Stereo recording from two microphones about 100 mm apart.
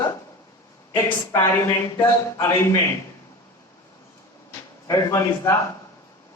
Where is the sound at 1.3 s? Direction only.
25° left (ahead or behind).